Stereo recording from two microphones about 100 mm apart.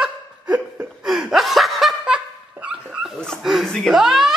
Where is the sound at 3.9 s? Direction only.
5° right (ahead or behind).